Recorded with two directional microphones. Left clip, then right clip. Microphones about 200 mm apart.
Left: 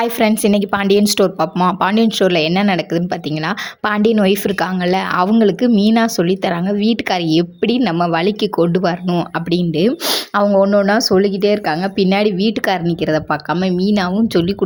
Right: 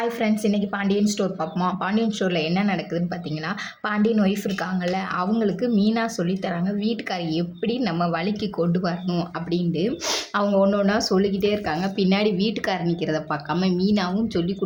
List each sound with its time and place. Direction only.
0.0 s a woman's voice: 50° left (ahead or behind)